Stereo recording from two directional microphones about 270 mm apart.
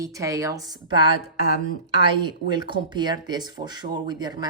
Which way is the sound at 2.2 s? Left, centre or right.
Centre.